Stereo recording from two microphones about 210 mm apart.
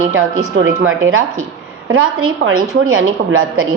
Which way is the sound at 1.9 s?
75° right (ahead or behind).